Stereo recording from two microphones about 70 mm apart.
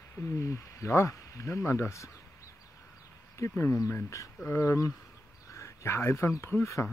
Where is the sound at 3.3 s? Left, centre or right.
Left.